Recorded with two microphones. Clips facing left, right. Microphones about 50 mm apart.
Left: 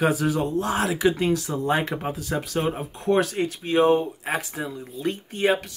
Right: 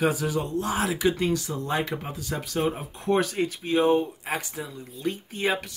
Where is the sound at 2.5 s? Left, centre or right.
Centre.